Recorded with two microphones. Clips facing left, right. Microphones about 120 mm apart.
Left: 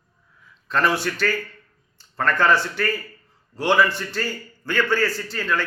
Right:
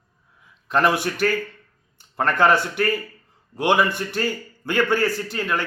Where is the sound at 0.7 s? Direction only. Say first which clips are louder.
Right 2 dB; 15° right (ahead or behind).